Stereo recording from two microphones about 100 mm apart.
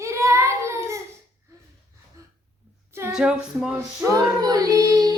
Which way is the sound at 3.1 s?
10° right (ahead or behind).